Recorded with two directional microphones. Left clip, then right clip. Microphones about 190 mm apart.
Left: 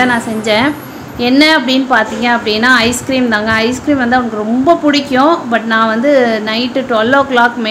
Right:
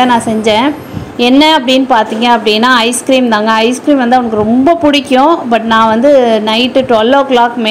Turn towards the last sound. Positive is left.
turn(degrees=-20)  # may be behind; listen again after turning